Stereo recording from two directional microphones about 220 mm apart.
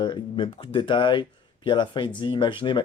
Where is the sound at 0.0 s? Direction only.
20° left (ahead or behind).